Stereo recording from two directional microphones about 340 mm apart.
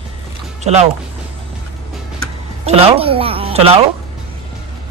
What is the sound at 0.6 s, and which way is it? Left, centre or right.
Speech, centre.